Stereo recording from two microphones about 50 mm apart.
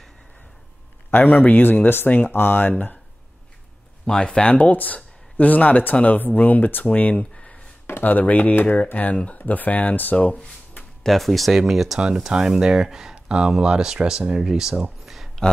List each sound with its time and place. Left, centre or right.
1.1 s speech: left
1.6 s speech: left
2.3 s speech: left
4.0 s speech: centre
4.6 s speech: left
7.3 s a sound: left
8.0 s speech: left
10.1 s speech: left
11.1 s speech: centre